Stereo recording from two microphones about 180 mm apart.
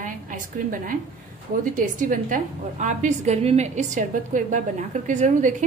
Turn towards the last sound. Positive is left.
turn(degrees=-45)  # may be behind; listen again after turning